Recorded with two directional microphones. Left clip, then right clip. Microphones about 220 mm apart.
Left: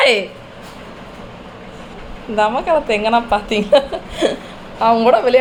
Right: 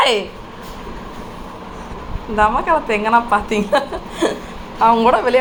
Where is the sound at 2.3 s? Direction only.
15° left (ahead or behind).